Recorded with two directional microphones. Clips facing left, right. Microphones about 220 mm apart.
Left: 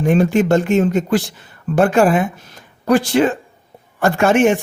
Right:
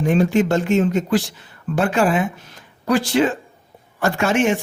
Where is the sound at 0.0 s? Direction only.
55° left (ahead or behind).